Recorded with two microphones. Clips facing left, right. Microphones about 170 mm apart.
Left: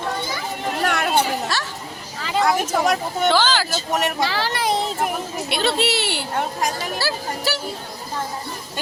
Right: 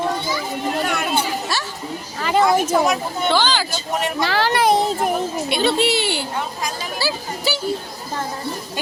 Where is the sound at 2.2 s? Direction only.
55° right (ahead or behind).